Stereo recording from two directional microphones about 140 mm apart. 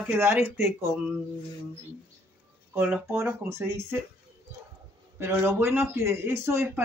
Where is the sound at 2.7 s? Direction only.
10° right (ahead or behind).